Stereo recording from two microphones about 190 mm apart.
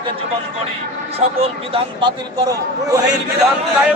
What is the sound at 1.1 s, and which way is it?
A man's voice, 30° right (ahead or behind).